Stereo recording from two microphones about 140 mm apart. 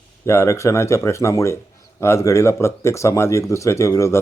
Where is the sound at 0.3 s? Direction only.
20° left (ahead or behind).